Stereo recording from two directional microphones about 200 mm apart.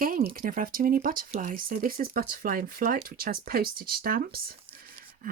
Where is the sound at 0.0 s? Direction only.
45° right (ahead or behind).